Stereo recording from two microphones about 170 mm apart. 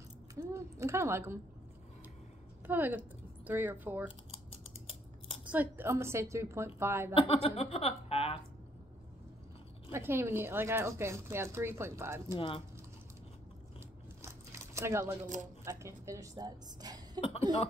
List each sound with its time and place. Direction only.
0.4 s a sound: 15° right (ahead or behind)
2.6 s a woman's voice: 10° right (ahead or behind)
4.5 s scissors: 35° left (ahead or behind)
5.5 s speech: 10° right (ahead or behind)
7.2 s speech: 35° left (ahead or behind)
9.8 s speech: 15° right (ahead or behind)
12.4 s speech: 30° left (ahead or behind)
14.2 s a sound: 15° right (ahead or behind)
15.6 s a woman's voice: 15° right (ahead or behind)
17.2 s speech: 35° left (ahead or behind)